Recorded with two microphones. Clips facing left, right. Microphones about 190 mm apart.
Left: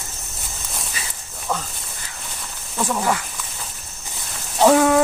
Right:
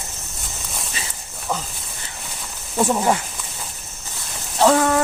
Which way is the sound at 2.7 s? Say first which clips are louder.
Right 3 dB; 25° right (ahead or behind).